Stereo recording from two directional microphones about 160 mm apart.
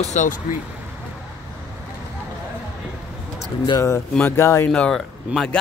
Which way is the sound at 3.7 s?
20° left (ahead or behind).